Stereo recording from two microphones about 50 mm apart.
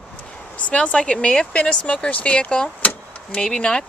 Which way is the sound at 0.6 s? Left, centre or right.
Left.